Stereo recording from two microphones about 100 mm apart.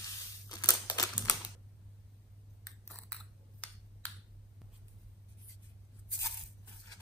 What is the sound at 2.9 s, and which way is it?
Chewing, 10° left (ahead or behind).